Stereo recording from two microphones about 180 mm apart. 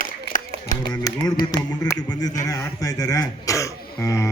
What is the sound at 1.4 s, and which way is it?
Music, 20° left (ahead or behind).